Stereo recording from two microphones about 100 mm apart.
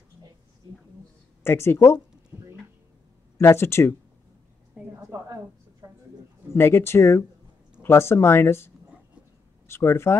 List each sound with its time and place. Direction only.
1.4 s speech: 25° left (ahead or behind)
3.3 s speech: 25° left (ahead or behind)
5.1 s a sound: 35° right (ahead or behind)
6.5 s speech: 25° left (ahead or behind)